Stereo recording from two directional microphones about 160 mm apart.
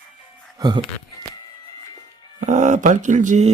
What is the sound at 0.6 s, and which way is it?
Speech, 25° right (ahead or behind).